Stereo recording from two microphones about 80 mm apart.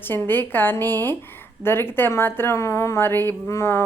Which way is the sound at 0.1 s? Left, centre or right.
Left.